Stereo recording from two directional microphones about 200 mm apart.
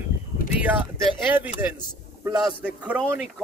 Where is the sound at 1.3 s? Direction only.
10° right (ahead or behind).